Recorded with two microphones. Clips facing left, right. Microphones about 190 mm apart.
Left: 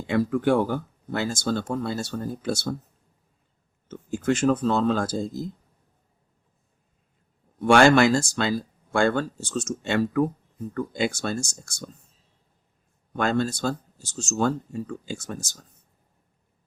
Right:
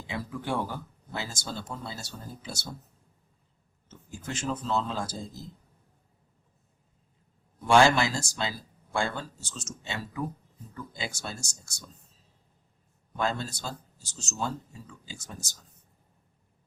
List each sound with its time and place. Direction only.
0.1 s speech: 60° left (ahead or behind)
3.8 s speech: 65° left (ahead or behind)
4.4 s speech: 55° left (ahead or behind)
7.6 s speech: 60° left (ahead or behind)
13.1 s speech: 70° left (ahead or behind); by 15.5 s 50° left (ahead or behind)